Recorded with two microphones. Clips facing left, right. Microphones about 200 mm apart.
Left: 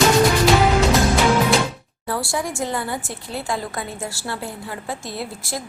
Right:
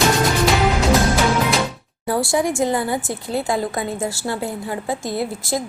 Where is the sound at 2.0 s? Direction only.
25° right (ahead or behind).